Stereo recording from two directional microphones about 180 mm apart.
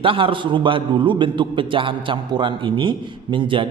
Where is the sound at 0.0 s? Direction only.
30° right (ahead or behind).